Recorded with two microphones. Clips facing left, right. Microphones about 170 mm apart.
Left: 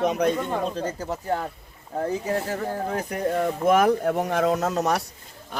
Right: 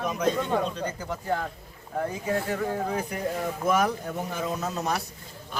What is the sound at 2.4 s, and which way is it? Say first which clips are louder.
Speech: even; 40° left (ahead or behind).